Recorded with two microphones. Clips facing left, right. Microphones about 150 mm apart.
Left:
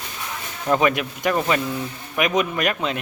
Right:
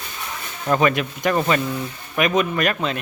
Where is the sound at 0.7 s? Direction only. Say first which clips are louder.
Right 1 dB; 10° left (ahead or behind).